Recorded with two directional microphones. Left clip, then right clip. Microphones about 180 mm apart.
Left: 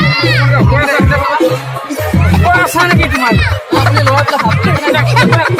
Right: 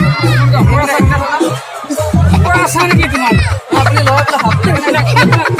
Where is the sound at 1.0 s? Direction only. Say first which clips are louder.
Left 2 dB; 15° right (ahead or behind).